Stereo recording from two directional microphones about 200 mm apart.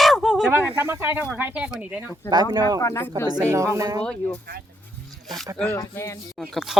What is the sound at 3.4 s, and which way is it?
Speech, 15° right (ahead or behind).